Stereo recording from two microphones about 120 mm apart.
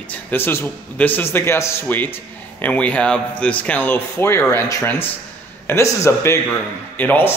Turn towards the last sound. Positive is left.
turn(degrees=15)  # may be behind; listen again after turning